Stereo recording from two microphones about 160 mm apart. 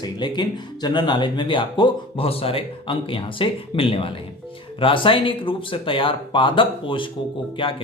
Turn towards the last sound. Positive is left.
turn(degrees=30)  # may be behind; listen again after turning